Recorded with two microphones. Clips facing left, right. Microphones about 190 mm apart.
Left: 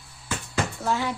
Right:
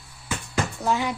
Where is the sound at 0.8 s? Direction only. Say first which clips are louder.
Right 3 dB; 15° right (ahead or behind).